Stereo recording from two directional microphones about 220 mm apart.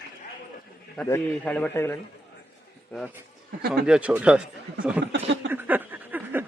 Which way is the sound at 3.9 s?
5° right (ahead or behind).